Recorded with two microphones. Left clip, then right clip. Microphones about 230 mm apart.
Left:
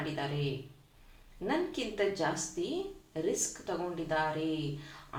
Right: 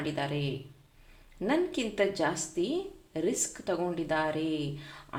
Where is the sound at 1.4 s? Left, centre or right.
Right.